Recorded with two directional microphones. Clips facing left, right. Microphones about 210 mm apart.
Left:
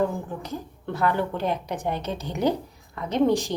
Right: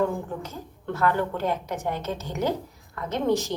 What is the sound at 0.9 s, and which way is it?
A woman's voice, 15° left (ahead or behind).